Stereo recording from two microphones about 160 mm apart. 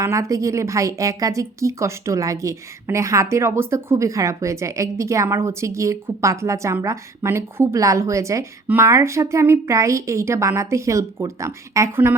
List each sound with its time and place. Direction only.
0.0 s speech: 20° right (ahead or behind)